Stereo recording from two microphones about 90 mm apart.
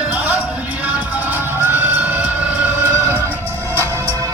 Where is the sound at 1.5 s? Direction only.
25° right (ahead or behind).